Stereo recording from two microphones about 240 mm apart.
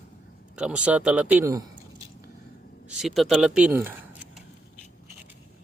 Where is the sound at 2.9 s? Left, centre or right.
Centre.